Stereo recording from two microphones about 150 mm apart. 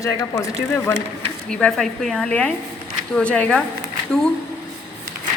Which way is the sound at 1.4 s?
5° left (ahead or behind).